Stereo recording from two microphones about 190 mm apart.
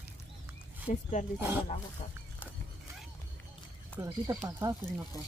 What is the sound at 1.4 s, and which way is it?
Speech, 10° right (ahead or behind).